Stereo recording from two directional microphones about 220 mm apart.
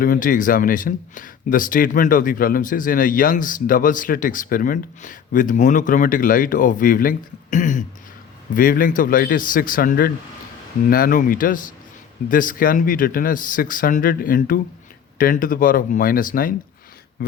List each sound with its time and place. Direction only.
0.0 s speech: 40° left (ahead or behind)